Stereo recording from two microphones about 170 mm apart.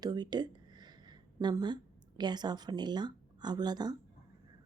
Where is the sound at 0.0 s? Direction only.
25° right (ahead or behind).